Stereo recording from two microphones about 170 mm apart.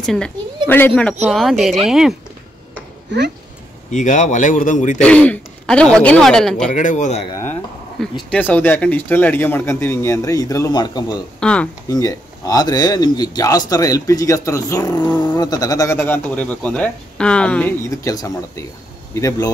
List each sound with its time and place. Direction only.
0.0 s speech: 5° left (ahead or behind)
3.9 s speech: 45° left (ahead or behind)
4.9 s speech: 5° left (ahead or behind)
6.7 s speech: 45° left (ahead or behind)
8.0 s speech: 10° left (ahead or behind); by 11.1 s 25° left (ahead or behind)
11.3 s speech: 5° left (ahead or behind)
11.9 s speech: 20° left (ahead or behind)